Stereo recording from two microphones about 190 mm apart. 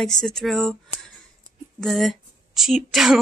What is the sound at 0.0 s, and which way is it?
Speech, 5° left (ahead or behind).